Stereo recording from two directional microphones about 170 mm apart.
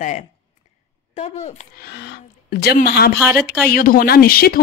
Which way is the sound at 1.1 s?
40° left (ahead or behind).